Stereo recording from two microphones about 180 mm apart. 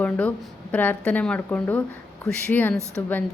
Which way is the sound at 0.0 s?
10° left (ahead or behind).